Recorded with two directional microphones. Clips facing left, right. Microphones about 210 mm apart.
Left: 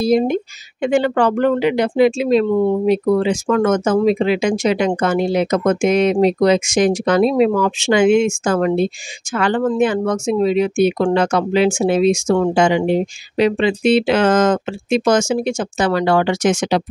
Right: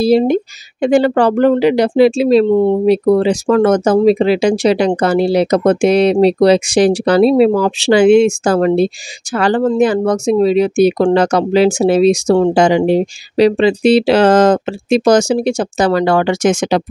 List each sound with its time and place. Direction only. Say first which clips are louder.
0.0 s speech: right 4 dB; 35° right (ahead or behind)